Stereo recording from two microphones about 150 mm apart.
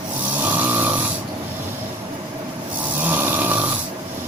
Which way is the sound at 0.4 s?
10° right (ahead or behind).